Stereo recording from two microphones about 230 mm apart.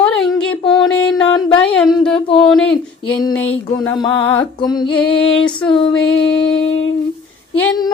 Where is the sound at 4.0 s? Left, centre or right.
Centre.